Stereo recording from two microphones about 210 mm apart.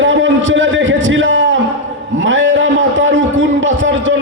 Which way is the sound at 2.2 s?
65° right (ahead or behind).